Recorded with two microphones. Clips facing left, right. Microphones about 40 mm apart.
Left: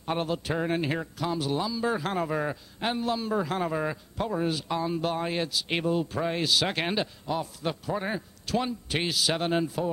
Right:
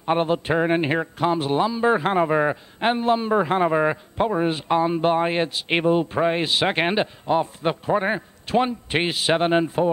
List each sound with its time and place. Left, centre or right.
0.0 s speech: right